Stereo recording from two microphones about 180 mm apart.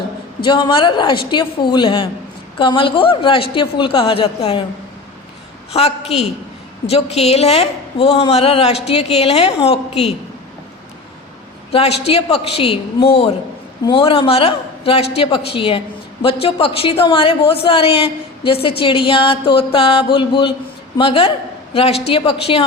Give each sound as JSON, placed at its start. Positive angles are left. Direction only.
{"t": 0.4, "sound": "a man's voice", "side_deg": 25}
{"t": 5.7, "sound": "a woman's voice", "side_deg": 35}
{"t": 11.7, "sound": "a woman's voice", "side_deg": 35}
{"t": 13.8, "sound": "a woman's voice", "side_deg": 30}